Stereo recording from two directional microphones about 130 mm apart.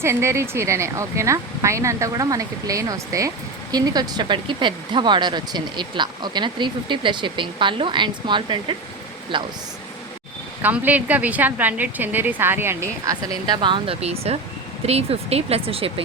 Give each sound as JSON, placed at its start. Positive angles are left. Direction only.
{"t": 0.0, "sound": "speech", "side_deg": -20}
{"t": 10.6, "sound": "a woman's voice", "side_deg": -10}
{"t": 14.0, "sound": "speech", "side_deg": -55}